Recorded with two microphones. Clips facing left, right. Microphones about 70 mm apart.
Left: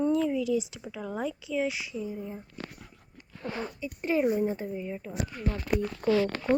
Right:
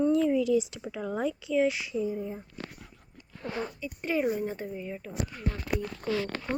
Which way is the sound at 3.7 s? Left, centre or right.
Left.